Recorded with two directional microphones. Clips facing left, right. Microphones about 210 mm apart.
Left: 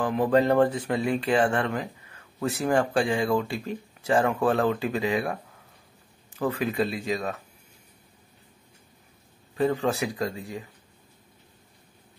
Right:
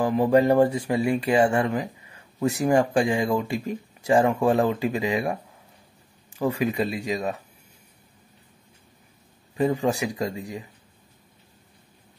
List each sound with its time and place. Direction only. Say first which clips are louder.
0.0 s speech: right 3 dB; 5° right (ahead or behind)
9.6 s speech: right 2 dB; 15° right (ahead or behind)